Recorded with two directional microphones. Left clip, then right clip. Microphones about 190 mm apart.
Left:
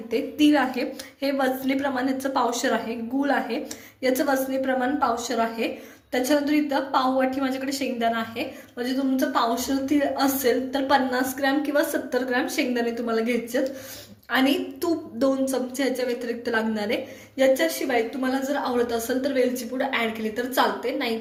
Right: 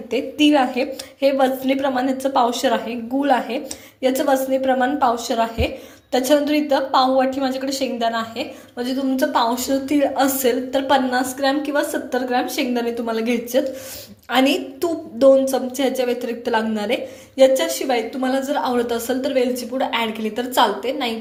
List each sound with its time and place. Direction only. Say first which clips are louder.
0.1 s a woman's voice: right 4 dB; 25° right (ahead or behind)
8.8 s a woman's voice: right 4 dB; 40° right (ahead or behind)